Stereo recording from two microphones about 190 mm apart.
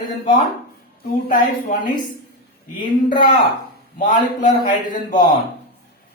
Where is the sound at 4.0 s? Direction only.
40° left (ahead or behind).